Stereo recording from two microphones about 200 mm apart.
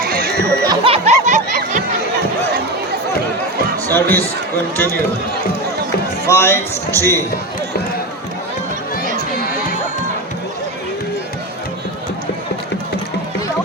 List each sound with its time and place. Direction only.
0.1 s a sound: 50° right (ahead or behind)
0.7 s music: 30° right (ahead or behind)
3.8 s speech: 10° left (ahead or behind)
6.2 s a man's voice: 15° left (ahead or behind)